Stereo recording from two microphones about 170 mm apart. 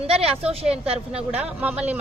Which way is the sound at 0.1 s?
35° right (ahead or behind).